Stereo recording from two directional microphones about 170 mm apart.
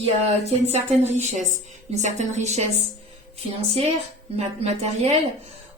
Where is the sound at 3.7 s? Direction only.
40° right (ahead or behind).